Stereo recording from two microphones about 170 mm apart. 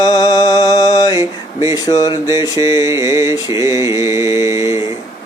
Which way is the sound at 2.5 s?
20° right (ahead or behind).